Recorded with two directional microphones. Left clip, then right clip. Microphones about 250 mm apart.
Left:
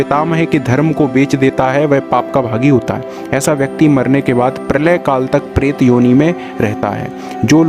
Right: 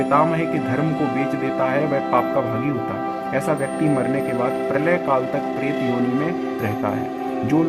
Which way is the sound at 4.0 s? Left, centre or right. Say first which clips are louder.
Left 8 dB; left.